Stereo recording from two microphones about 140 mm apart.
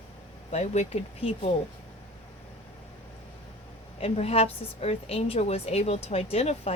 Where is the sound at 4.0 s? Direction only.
45° left (ahead or behind).